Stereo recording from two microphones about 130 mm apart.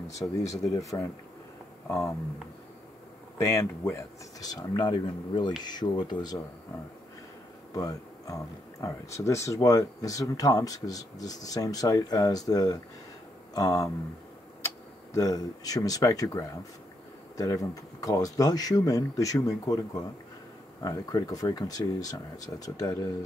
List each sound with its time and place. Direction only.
0.5 s speech: 25° left (ahead or behind)
3.3 s speech: 20° left (ahead or behind)
7.7 s speech: 25° left (ahead or behind)
15.1 s speech: 25° left (ahead or behind)
20.8 s speech: 25° left (ahead or behind)